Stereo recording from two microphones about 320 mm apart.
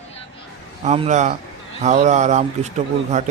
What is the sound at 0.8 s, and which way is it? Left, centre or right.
A man's voice, centre.